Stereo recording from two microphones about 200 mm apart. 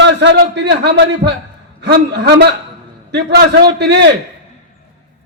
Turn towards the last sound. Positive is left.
turn(degrees=-60)  # may be behind; listen again after turning